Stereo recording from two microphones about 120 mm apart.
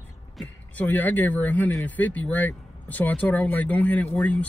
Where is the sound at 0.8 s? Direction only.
15° left (ahead or behind).